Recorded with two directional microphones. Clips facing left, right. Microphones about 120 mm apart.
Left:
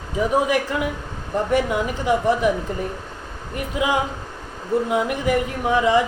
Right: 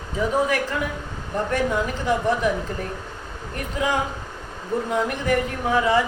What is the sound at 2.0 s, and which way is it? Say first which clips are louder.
Speech: left 3 dB; 15° left (ahead or behind).